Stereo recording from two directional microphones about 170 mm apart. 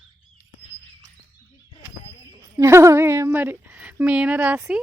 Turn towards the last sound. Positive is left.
turn(degrees=-10)  # may be behind; listen again after turning